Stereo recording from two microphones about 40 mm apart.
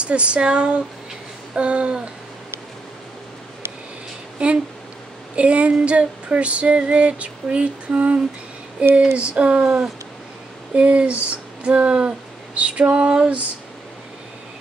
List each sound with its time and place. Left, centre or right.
0.0 s female singing: right
4.4 s female singing: right
10.7 s a sound: right
12.5 s female singing: right